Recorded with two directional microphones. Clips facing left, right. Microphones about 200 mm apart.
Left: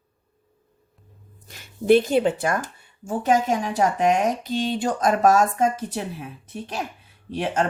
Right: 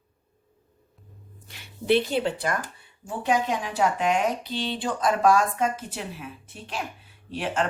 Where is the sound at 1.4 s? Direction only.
45° left (ahead or behind).